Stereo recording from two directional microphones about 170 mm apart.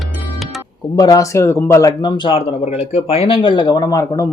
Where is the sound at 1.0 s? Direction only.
20° left (ahead or behind).